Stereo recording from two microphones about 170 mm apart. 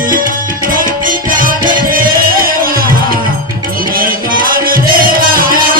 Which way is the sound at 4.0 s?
55° right (ahead or behind).